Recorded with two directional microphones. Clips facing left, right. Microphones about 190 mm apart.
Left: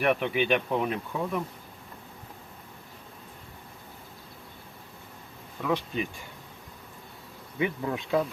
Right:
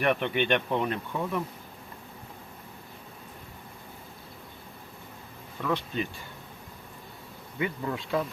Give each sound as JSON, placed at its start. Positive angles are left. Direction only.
{"t": 0.0, "sound": "speech", "side_deg": 5}
{"t": 5.6, "sound": "speech", "side_deg": 10}
{"t": 7.6, "sound": "speech", "side_deg": 20}